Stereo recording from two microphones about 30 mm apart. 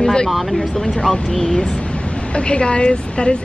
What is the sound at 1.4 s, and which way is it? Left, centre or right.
Speech, centre.